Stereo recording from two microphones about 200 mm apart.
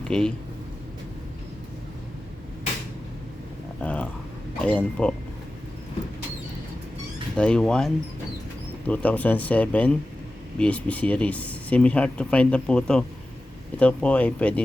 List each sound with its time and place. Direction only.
0.1 s speech: 5° left (ahead or behind)
3.8 s a sound: 5° left (ahead or behind)
4.6 s speech: 5° left (ahead or behind)
7.3 s speech: 5° left (ahead or behind)